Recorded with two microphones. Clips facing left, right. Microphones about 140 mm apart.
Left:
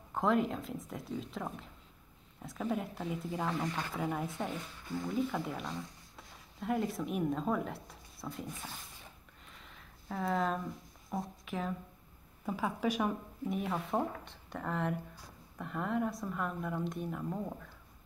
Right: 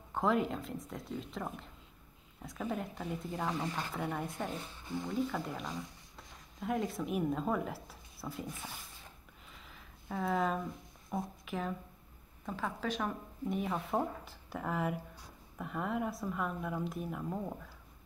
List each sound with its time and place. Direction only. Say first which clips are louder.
0.1 s speech: left 1 dB; centre (ahead or behind)
4.6 s a woman's voice: even; 25° right (ahead or behind)
5.0 s speech: left 1 dB; centre (ahead or behind)
9.6 s a sound: even; centre (ahead or behind)
11.1 s speech: even; centre (ahead or behind)
12.4 s speech: left 4 dB; 10° left (ahead or behind)
13.5 s speech: even; centre (ahead or behind)